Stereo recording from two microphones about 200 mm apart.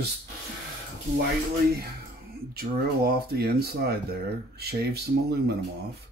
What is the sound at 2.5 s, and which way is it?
Speech, 50° right (ahead or behind).